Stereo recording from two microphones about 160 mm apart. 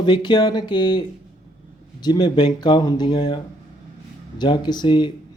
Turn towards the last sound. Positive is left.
turn(degrees=30)  # may be behind; listen again after turning